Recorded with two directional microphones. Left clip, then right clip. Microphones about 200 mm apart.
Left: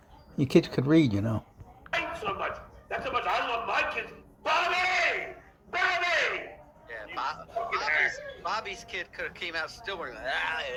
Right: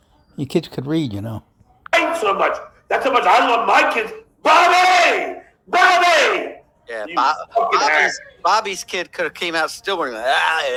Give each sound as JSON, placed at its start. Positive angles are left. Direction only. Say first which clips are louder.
{"t": 0.3, "sound": "speech", "louder": "right 2 dB", "side_deg": -30}
{"t": 1.8, "sound": "speech", "louder": "right 15 dB", "side_deg": -45}